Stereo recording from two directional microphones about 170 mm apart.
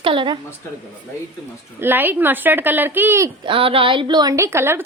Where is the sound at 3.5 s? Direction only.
30° right (ahead or behind); by 4.8 s 15° right (ahead or behind).